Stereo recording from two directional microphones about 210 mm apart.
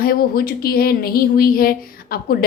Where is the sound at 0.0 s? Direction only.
45° left (ahead or behind).